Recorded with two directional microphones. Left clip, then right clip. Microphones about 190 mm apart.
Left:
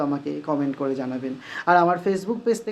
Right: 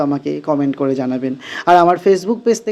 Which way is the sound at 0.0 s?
35° right (ahead or behind).